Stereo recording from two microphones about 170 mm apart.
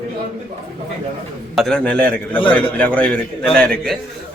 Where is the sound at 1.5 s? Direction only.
Centre (ahead or behind).